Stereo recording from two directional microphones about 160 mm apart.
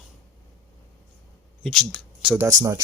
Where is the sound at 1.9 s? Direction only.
5° right (ahead or behind).